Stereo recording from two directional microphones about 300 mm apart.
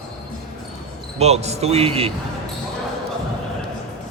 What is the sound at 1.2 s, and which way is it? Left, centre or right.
Speech, right.